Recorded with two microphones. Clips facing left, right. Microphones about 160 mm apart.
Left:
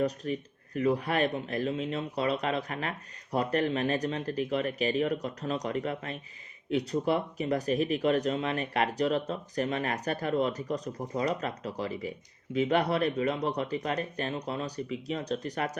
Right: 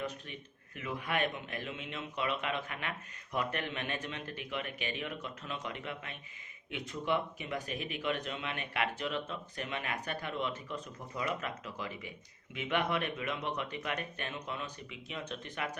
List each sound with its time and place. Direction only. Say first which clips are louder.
0.0 s speech: left 11 dB; 40° left (ahead or behind)